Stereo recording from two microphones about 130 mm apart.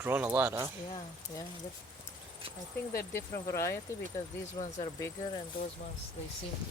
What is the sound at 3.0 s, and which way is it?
Speech, 25° left (ahead or behind).